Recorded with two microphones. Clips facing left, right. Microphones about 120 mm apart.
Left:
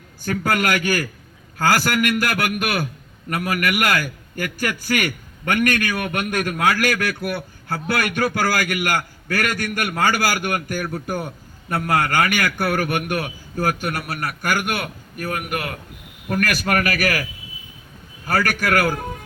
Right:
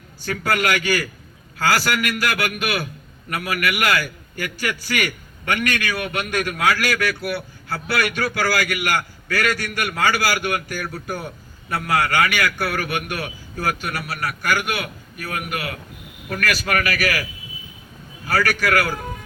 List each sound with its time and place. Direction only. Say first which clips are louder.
0.3 s a man's voice: left 1 dB; 45° left (ahead or behind)
18.3 s a man's voice: even; 50° left (ahead or behind)